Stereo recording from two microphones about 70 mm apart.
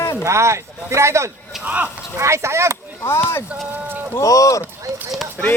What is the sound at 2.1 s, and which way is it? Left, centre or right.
Speech, right.